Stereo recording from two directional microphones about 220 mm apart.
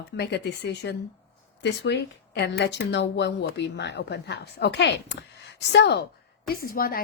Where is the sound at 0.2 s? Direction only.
50° left (ahead or behind).